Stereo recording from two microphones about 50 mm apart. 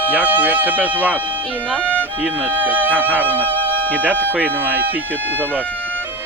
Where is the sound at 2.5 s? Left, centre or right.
Right.